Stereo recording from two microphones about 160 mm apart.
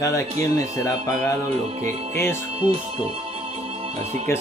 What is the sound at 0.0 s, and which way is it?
Music, 20° left (ahead or behind).